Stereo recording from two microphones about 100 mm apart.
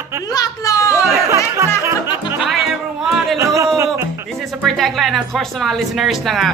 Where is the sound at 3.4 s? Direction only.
30° right (ahead or behind).